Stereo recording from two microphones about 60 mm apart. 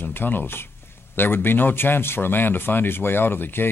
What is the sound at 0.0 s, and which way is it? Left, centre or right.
Speech, left.